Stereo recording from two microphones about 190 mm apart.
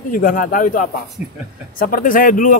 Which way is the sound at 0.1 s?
45° left (ahead or behind).